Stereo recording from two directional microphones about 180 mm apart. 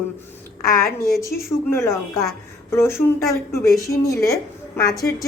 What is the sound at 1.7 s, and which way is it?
Speech, 15° left (ahead or behind).